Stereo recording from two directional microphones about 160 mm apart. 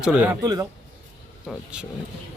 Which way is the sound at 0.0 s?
10° right (ahead or behind).